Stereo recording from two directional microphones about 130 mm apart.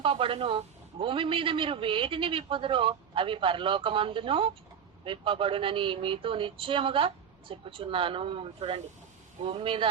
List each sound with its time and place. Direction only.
0.0 s a man's voice: 40° right (ahead or behind)